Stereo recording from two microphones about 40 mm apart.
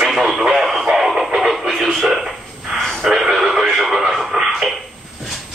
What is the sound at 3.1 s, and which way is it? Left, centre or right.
Radio, centre.